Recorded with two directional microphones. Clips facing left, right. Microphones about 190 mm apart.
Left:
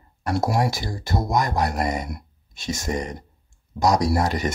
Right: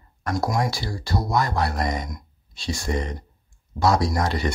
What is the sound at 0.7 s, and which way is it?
Speech, 20° left (ahead or behind).